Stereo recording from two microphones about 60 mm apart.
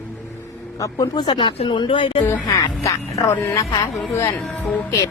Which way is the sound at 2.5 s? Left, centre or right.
Left.